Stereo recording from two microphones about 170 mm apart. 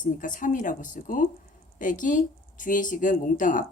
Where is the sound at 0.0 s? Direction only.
50° left (ahead or behind).